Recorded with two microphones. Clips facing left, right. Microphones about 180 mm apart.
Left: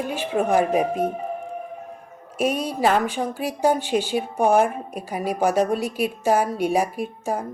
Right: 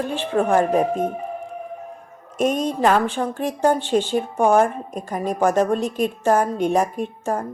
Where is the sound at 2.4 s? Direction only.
10° left (ahead or behind).